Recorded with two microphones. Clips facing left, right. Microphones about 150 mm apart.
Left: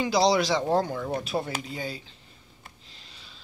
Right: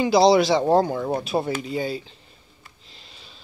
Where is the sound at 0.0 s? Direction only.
30° right (ahead or behind).